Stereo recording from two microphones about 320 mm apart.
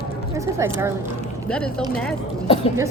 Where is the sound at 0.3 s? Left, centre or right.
Centre.